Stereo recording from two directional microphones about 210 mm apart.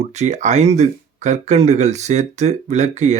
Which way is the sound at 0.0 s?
35° right (ahead or behind).